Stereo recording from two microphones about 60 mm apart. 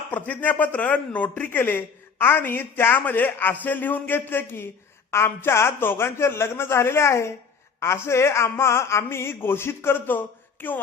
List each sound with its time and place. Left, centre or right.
0.1 s a man's voice: left
1.5 s a woman's voice: left